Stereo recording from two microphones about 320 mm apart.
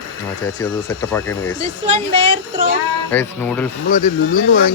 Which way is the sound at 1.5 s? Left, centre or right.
Centre.